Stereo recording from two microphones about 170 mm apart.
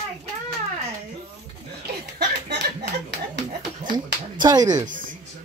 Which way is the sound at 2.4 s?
80° right.